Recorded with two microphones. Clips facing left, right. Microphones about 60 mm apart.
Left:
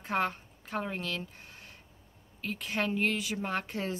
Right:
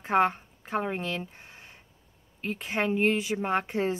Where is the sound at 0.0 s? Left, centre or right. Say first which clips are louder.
Right 7 dB; right.